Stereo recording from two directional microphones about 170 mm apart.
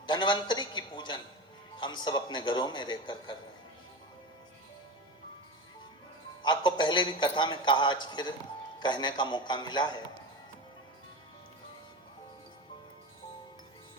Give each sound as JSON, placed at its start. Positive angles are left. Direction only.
{"t": 0.0, "sound": "a man's voice", "side_deg": 25}
{"t": 6.4, "sound": "a man's voice", "side_deg": 25}